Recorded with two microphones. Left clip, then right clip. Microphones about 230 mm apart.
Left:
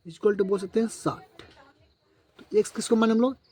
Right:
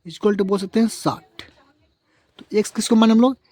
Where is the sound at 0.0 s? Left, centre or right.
Right.